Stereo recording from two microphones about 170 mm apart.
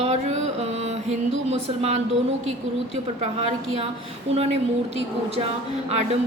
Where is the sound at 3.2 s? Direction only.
35° right (ahead or behind).